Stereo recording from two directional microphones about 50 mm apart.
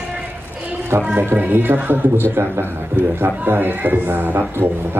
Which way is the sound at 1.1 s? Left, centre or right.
Right.